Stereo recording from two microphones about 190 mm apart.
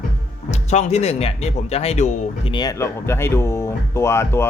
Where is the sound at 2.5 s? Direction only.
20° left (ahead or behind).